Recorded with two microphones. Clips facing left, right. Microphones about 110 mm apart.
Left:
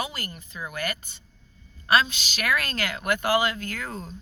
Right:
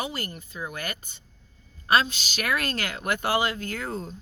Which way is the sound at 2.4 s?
40° right (ahead or behind).